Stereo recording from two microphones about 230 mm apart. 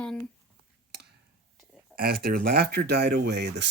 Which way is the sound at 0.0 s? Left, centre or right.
Centre.